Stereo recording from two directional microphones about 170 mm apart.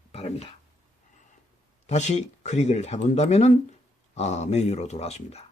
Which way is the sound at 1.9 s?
40° left (ahead or behind).